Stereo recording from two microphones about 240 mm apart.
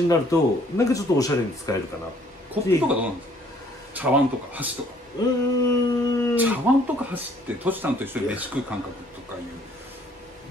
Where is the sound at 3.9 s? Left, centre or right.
Centre.